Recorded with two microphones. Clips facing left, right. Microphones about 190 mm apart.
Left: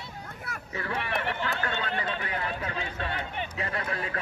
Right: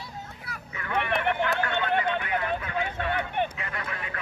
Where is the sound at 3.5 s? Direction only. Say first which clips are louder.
Left 3 dB; 35° left (ahead or behind).